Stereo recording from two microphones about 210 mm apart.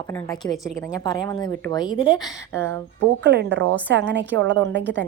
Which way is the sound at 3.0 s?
55° right (ahead or behind).